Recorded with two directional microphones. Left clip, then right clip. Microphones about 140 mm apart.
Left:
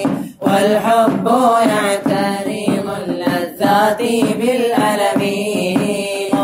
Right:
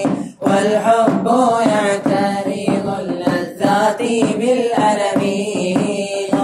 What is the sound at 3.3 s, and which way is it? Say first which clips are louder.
Mantra: left 3 dB; 45° left (ahead or behind).